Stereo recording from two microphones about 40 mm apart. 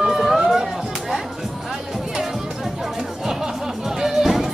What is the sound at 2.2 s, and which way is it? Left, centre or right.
Music, centre.